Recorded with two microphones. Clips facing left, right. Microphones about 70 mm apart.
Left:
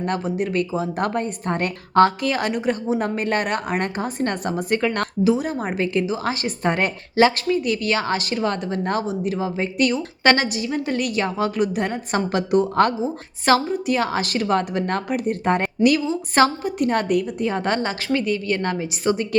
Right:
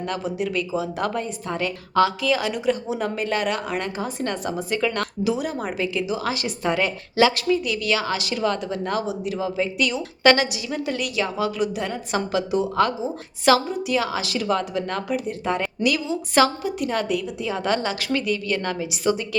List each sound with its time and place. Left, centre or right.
0.0 s a woman's voice: left
5.3 s a woman's voice: left